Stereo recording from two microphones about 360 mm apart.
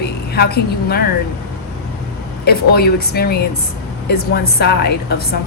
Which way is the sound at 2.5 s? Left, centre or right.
Left.